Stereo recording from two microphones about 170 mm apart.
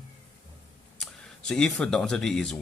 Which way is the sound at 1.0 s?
5° left (ahead or behind).